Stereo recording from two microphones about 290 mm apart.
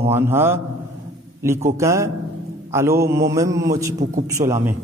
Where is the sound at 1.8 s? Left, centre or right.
Centre.